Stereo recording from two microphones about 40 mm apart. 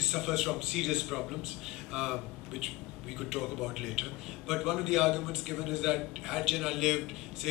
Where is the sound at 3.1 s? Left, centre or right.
Centre.